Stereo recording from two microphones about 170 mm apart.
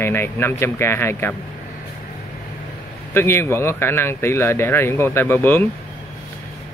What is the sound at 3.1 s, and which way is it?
Speech, 15° left (ahead or behind).